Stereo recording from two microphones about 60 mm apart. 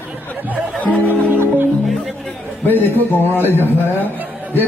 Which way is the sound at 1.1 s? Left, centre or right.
Right.